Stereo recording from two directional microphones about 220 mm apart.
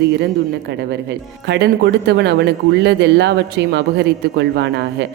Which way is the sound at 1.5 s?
50° right (ahead or behind).